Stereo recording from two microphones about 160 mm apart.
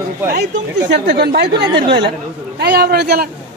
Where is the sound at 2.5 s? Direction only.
90° right.